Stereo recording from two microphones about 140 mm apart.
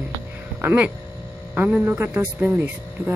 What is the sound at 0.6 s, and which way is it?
Speech, 10° right (ahead or behind).